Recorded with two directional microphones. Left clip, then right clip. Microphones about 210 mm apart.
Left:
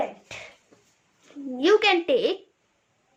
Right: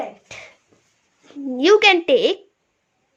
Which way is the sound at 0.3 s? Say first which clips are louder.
Right 2 dB; 30° right (ahead or behind).